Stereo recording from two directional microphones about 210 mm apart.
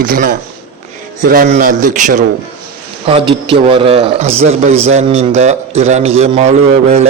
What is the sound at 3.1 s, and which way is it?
A man's voice, 25° right (ahead or behind).